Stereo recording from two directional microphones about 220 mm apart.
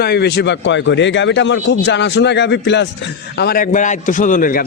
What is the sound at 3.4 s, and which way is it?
A man's voice, 40° left (ahead or behind).